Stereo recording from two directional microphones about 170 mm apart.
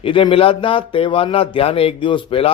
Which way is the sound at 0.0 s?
30° left (ahead or behind).